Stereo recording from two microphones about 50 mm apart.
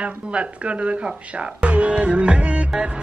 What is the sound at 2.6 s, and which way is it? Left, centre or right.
Music, right.